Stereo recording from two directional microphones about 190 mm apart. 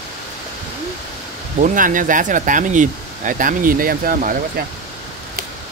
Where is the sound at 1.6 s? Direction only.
45° right (ahead or behind).